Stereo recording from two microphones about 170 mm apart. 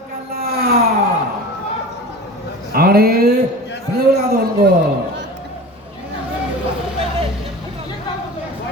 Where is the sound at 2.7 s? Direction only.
60° right (ahead or behind).